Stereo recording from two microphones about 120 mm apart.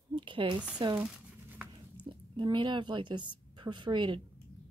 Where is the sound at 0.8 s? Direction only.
45° right (ahead or behind).